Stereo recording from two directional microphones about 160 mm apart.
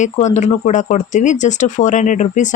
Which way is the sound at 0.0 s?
45° left (ahead or behind).